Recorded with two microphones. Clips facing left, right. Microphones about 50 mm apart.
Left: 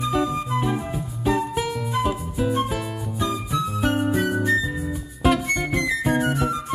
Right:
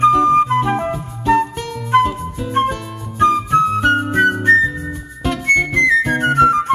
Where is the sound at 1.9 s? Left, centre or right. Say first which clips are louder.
Right 12 dB; right.